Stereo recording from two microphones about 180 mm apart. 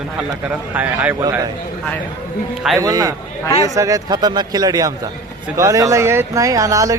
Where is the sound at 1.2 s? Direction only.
20° right (ahead or behind).